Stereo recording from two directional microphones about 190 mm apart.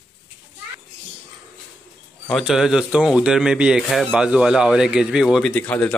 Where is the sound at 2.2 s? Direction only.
Centre (ahead or behind).